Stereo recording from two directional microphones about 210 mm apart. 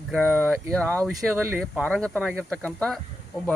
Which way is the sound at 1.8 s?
5° left (ahead or behind).